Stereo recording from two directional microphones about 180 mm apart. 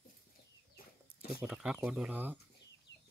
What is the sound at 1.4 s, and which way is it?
Speech, 5° right (ahead or behind).